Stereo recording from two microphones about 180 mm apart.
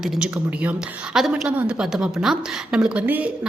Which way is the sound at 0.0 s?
5° right (ahead or behind).